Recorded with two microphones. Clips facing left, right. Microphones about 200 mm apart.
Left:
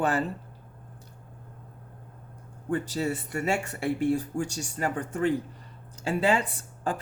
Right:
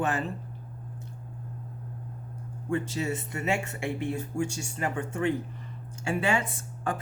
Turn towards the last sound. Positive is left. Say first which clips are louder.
# left 1 dB
turn(degrees=35)  # may be behind; listen again after turning